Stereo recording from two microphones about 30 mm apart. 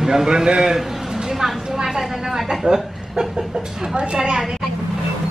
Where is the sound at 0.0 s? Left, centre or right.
Centre.